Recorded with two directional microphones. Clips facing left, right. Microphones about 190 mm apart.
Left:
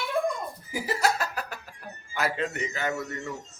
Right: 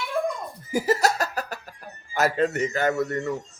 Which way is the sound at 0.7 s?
40° right (ahead or behind).